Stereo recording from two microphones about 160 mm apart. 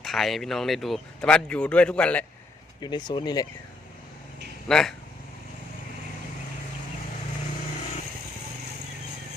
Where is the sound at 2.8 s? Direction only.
25° left (ahead or behind).